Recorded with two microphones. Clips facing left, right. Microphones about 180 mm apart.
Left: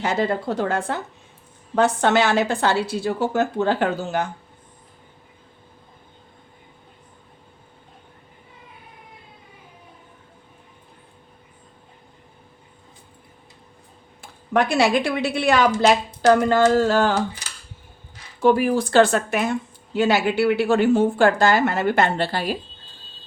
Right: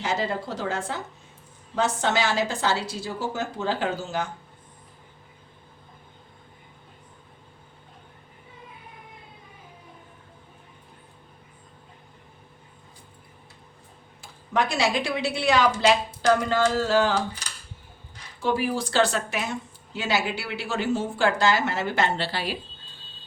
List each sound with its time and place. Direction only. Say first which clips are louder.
0.0 s speech: left 5 dB; 55° left (ahead or behind)
14.2 s a woman's voice: left 5 dB; 55° left (ahead or behind)
18.4 s speech: left 8 dB; 55° left (ahead or behind)